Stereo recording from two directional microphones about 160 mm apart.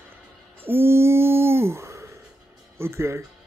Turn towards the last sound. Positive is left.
turn(degrees=-15)  # may be behind; listen again after turning